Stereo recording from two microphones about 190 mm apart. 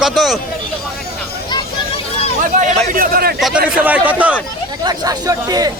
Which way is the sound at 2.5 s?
45° right (ahead or behind).